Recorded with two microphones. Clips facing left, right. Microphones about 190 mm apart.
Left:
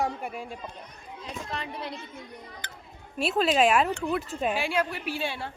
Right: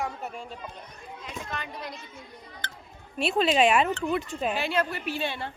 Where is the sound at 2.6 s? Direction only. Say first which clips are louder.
Right 3 dB; 15° left (ahead or behind).